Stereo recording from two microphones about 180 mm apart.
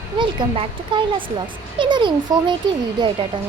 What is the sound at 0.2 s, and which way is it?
A woman's voice, 25° right (ahead or behind).